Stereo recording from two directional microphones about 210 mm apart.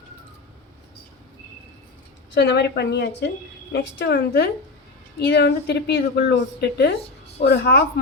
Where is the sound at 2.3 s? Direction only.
55° left (ahead or behind).